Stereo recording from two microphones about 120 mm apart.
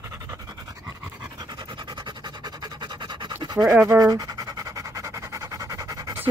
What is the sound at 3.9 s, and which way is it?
Speech, 30° right (ahead or behind).